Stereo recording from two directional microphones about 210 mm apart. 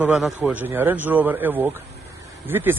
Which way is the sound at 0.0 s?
Centre (ahead or behind).